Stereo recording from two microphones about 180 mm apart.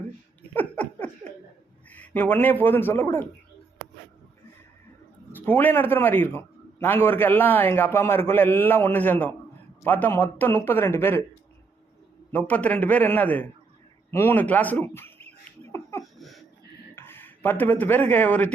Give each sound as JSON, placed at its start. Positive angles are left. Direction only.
{"t": 0.5, "sound": "laughter", "side_deg": 10}
{"t": 1.9, "sound": "speech", "side_deg": 10}
{"t": 5.3, "sound": "a man's voice", "side_deg": 10}
{"t": 12.3, "sound": "a man's voice", "side_deg": 10}
{"t": 15.7, "sound": "a sound", "side_deg": 15}
{"t": 16.1, "sound": "a sound", "side_deg": 0}
{"t": 16.9, "sound": "a man's voice", "side_deg": 10}